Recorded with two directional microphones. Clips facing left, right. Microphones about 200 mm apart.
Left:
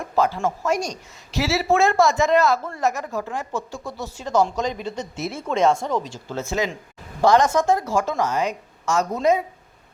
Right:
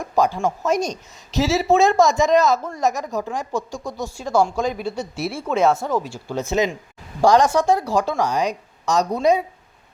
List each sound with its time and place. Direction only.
0.0 s speech: 15° right (ahead or behind)